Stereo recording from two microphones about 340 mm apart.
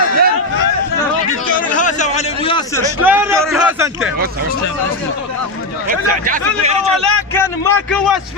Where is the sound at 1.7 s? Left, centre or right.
Left.